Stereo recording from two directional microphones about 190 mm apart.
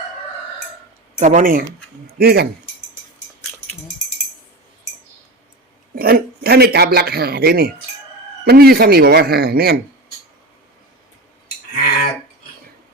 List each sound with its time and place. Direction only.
1.2 s speech: 40° right (ahead or behind)
2.1 s speech: 55° right (ahead or behind)
5.9 s speech: 50° right (ahead or behind)